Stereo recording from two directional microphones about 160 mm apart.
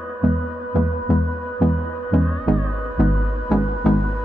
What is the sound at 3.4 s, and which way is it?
Music, centre (ahead or behind).